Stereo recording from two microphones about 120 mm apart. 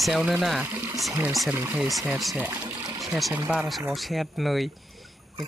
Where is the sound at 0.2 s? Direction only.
5° right (ahead or behind).